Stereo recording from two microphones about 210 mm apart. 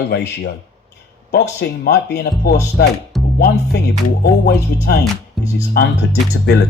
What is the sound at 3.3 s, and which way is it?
Speech, 50° left (ahead or behind).